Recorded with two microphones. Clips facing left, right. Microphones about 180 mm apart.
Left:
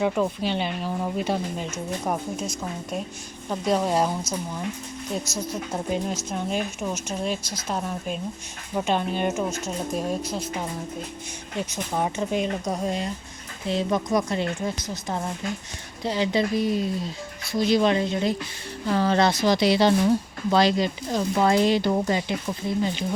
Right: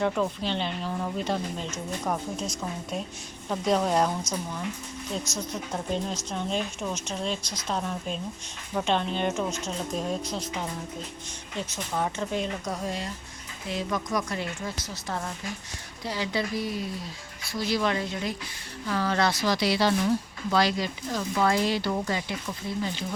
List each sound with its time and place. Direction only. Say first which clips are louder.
0.0 s speech: left 3 dB; 10° left (ahead or behind)